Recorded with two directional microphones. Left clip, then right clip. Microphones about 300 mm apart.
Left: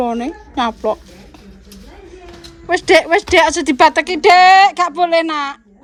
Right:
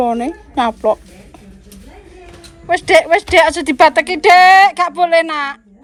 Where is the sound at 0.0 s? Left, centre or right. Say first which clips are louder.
Right 3 dB; centre.